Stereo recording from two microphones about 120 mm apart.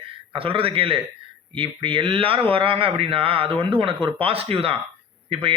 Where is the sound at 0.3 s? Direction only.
50° right (ahead or behind).